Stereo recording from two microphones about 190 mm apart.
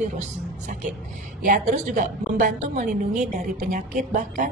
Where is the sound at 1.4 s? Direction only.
45° right (ahead or behind).